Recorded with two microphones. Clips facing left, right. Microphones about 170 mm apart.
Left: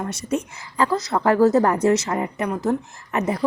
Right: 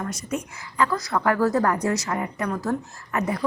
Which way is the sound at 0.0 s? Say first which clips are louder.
Left 4 dB; 25° left (ahead or behind).